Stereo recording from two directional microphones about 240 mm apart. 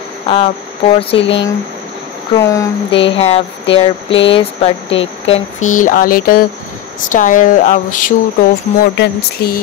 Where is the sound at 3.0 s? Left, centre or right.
Left.